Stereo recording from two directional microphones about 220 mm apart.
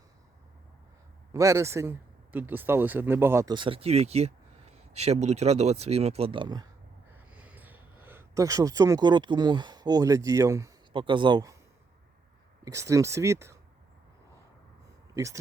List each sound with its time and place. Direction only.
1.3 s speech: 15° right (ahead or behind)
7.1 s speech: 5° right (ahead or behind)
12.6 s speech: 15° right (ahead or behind)
15.1 s speech: 15° right (ahead or behind)